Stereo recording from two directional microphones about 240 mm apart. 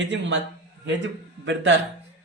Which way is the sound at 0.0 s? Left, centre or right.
Right.